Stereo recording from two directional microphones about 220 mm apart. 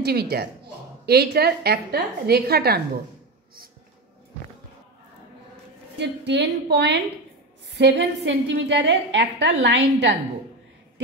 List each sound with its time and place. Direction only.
0.0 s a woman's voice: 45° right (ahead or behind)
5.9 s a woman's voice: 50° right (ahead or behind)